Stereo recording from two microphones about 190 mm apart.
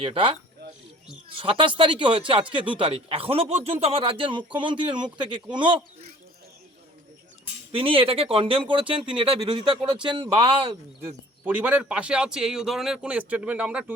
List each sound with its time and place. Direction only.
0.0 s speech: 30° right (ahead or behind)
1.4 s speech: 30° right (ahead or behind)
7.7 s speech: 30° right (ahead or behind)
11.0 s a man's voice: 10° right (ahead or behind)